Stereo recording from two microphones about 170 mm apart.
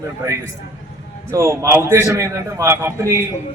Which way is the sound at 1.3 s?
15° right (ahead or behind).